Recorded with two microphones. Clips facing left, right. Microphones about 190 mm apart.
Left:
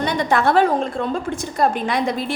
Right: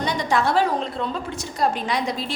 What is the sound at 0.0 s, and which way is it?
A woman's voice, 55° left (ahead or behind).